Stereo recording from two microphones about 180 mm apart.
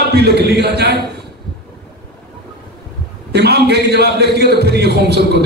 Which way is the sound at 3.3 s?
65° right (ahead or behind).